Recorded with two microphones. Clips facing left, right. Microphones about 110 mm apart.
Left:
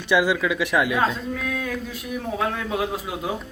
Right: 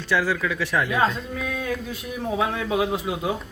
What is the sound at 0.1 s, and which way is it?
Speech, 15° left (ahead or behind).